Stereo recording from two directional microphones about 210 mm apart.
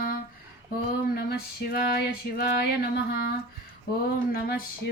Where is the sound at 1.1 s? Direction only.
50° left (ahead or behind).